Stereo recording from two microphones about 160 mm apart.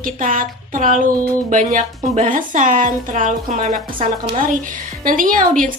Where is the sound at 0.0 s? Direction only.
60° right (ahead or behind).